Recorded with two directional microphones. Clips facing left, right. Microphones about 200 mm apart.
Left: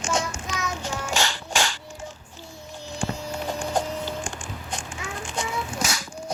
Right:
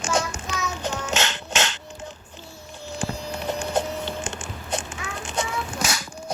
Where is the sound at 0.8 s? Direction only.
20° right (ahead or behind).